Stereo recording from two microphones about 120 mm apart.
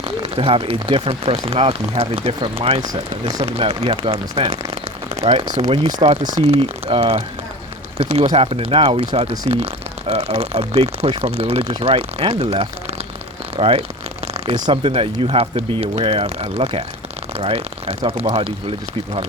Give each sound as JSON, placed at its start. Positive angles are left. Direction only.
{"t": 0.0, "sound": "speech", "side_deg": -50}
{"t": 2.8, "sound": "speech", "side_deg": -35}
{"t": 3.4, "sound": "speech", "side_deg": -50}
{"t": 5.2, "sound": "speech", "side_deg": -60}
{"t": 5.5, "sound": "speech", "side_deg": -35}